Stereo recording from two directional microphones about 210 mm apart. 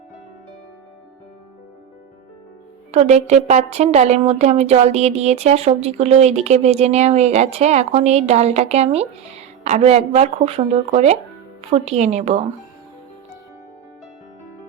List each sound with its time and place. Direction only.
2.9 s a woman's voice: 30° right (ahead or behind)